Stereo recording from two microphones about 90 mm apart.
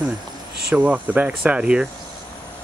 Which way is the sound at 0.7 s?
15° right (ahead or behind).